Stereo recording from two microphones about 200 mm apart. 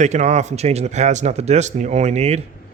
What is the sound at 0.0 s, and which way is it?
Speech, 35° right (ahead or behind).